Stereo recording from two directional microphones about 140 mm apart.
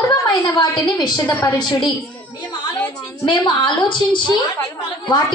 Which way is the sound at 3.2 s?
35° left (ahead or behind).